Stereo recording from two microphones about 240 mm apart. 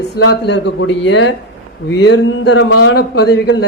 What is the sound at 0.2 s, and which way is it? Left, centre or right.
Speech, left.